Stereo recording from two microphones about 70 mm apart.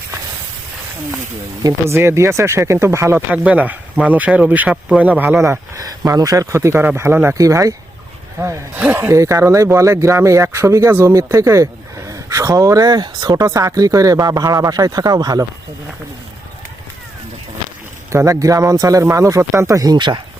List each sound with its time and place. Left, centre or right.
1.9 s speech: right
3.2 s speech: centre
5.4 s speech: right
5.8 s speech: right
7.3 s speech: right
8.7 s speech: right
9.0 s speech: right
18.1 s speech: right